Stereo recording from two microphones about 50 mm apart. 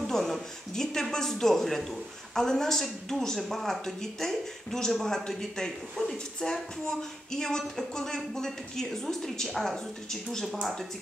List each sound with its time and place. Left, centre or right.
0.0 s speech: centre